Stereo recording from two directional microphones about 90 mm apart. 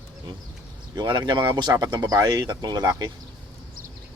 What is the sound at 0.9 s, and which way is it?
Speech, 50° right (ahead or behind).